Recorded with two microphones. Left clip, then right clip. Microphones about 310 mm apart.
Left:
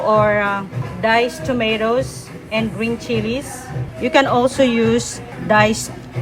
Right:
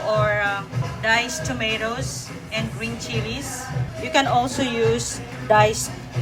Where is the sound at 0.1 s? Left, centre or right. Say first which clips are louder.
Left 5 dB; centre.